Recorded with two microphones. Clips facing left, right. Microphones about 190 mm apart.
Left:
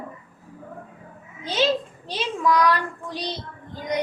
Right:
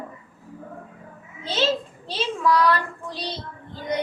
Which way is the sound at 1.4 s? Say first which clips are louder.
Left 1 dB; 15° left (ahead or behind).